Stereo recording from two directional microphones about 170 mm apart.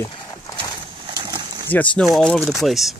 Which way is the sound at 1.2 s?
20° right (ahead or behind).